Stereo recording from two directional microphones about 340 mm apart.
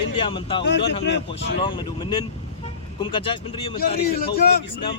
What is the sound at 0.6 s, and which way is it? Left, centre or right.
Speech, left.